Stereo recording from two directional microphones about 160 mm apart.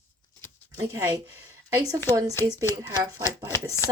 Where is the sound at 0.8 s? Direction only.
20° right (ahead or behind).